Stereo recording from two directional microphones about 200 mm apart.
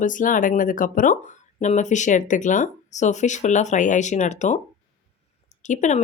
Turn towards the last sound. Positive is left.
turn(degrees=35)  # may be behind; listen again after turning